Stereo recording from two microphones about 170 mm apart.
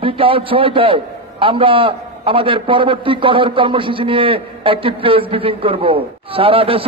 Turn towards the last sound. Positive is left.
turn(degrees=-35)  # may be behind; listen again after turning